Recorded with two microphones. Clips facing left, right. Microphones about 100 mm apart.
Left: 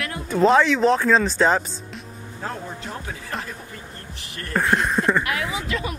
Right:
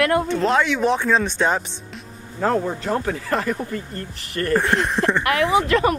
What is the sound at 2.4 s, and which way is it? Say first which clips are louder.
Speech: right 11 dB; 60° right (ahead or behind).